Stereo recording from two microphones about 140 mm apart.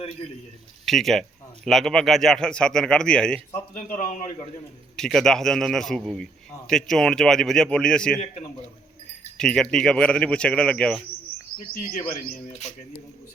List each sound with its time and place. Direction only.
0.9 s speech: centre (ahead or behind)
3.9 s a man's voice: 65° left (ahead or behind)
4.9 s speech: 5° left (ahead or behind)
9.4 s speech: 5° left (ahead or behind)